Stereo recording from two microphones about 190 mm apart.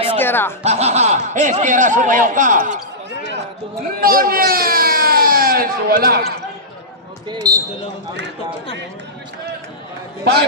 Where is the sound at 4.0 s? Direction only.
50° right (ahead or behind).